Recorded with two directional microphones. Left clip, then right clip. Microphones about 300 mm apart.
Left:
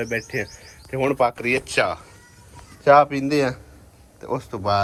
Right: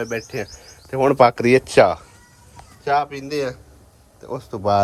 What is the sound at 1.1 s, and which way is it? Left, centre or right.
Speech, right.